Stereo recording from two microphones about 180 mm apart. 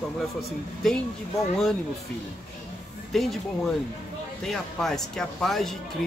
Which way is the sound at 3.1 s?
Centre (ahead or behind).